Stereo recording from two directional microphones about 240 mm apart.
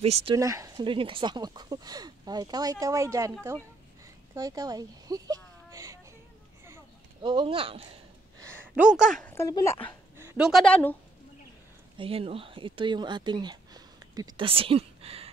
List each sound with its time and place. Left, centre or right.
0.0 s speech: right
4.4 s speech: centre
6.6 s a sound: centre
8.4 s speech: centre
10.1 s a woman's voice: centre
12.0 s speech: right